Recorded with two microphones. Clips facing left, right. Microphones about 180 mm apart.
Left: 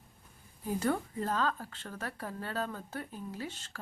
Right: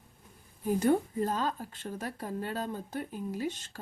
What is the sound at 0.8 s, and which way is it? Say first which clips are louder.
Speech: right 5 dB; 20° right (ahead or behind).